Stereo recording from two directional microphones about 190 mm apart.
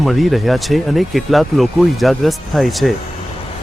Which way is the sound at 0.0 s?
Centre (ahead or behind).